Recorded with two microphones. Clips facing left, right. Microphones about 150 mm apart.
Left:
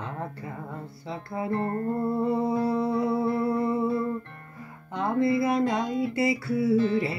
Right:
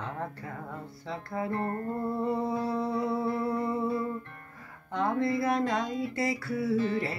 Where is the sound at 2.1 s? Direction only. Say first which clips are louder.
Left 3 dB; 5° left (ahead or behind).